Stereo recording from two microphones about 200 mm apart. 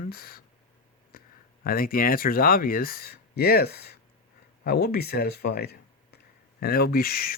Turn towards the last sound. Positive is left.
turn(degrees=50)  # may be behind; listen again after turning